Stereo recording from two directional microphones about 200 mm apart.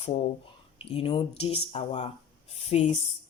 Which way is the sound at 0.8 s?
25° left (ahead or behind).